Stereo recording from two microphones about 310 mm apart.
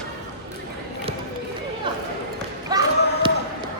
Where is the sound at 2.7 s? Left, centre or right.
Centre.